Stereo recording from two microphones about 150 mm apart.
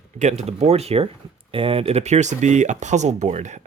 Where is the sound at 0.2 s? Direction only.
50° right (ahead or behind).